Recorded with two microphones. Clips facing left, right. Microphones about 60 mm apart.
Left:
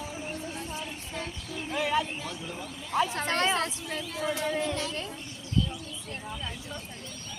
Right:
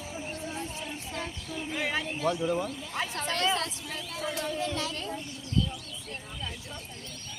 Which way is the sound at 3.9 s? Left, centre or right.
Centre.